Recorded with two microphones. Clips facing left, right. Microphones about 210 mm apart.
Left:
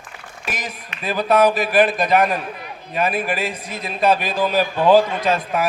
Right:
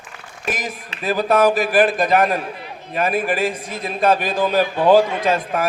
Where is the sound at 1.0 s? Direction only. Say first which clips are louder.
Even; 50° right (ahead or behind).